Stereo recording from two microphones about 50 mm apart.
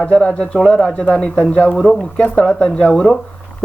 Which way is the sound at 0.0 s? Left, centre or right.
Left.